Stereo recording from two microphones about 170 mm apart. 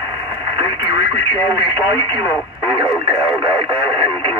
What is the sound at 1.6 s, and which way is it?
Speech, 25° right (ahead or behind).